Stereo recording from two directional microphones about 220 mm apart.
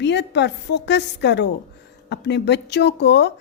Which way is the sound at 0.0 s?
50° left (ahead or behind).